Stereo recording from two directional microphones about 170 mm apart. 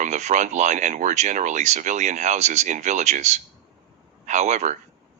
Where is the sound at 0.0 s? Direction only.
45° right (ahead or behind).